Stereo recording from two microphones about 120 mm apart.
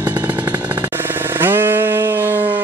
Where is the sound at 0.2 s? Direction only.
15° right (ahead or behind).